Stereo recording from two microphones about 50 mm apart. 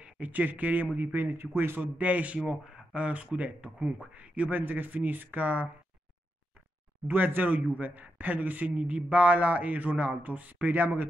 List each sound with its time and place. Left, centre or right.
0.0 s a man's voice: right
1.8 s a man's voice: right
2.4 s speech: centre
2.9 s a man's voice: right
7.1 s a man's voice: right